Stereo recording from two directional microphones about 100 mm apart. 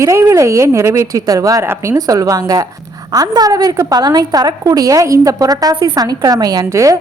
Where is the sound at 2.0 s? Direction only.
35° right (ahead or behind).